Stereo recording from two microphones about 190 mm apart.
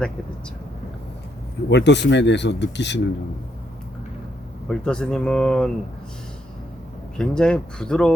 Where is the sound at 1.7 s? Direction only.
65° left (ahead or behind).